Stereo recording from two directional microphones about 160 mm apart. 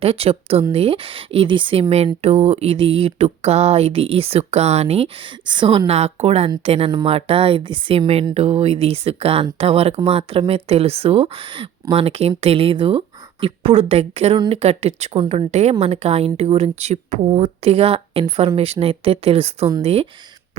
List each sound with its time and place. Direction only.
0.0 s speech: 40° right (ahead or behind)